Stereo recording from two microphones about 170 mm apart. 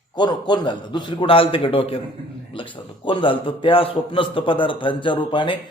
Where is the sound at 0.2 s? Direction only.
25° left (ahead or behind).